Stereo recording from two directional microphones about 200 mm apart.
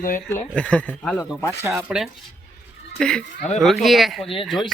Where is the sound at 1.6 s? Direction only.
5° right (ahead or behind).